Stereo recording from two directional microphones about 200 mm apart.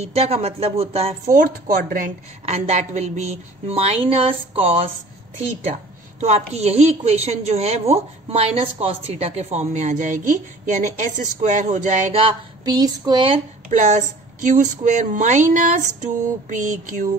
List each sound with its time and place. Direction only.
0.0 s a woman's voice: 30° right (ahead or behind)
1.3 s a woman's voice: 45° right (ahead or behind); by 13.4 s 25° right (ahead or behind)
13.7 s a woman's voice: 40° right (ahead or behind)